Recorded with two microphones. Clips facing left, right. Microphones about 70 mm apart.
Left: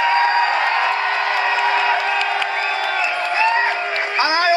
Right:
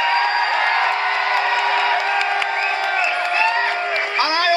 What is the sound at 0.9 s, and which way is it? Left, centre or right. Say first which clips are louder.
Crowd: even; right.